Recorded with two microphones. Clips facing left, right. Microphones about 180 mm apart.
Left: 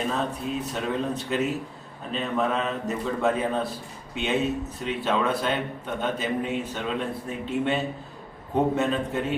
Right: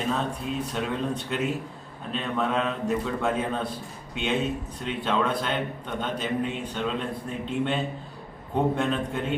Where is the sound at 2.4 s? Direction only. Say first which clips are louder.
Right 1 dB; centre (ahead or behind).